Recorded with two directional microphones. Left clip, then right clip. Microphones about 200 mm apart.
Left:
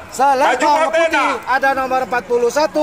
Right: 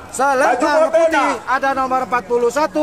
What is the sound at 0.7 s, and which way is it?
Speech, 40° right (ahead or behind).